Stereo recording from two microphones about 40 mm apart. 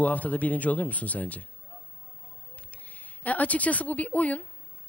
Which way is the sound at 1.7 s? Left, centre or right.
Left.